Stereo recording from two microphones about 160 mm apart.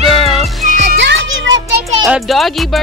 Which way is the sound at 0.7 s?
80° right.